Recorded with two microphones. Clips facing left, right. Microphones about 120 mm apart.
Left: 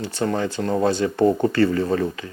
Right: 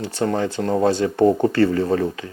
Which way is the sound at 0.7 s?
25° right (ahead or behind).